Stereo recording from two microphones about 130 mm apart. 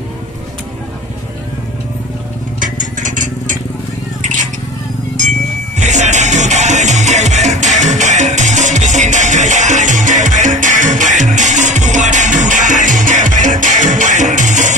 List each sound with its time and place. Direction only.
2.6 s vehicle: 80° right
5.8 s music: 65° right (ahead or behind)